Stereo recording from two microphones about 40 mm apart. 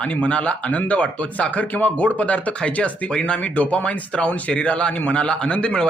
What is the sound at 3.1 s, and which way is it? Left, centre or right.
Speech, left.